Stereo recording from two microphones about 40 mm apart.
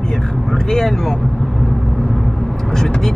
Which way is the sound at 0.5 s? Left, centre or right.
Centre.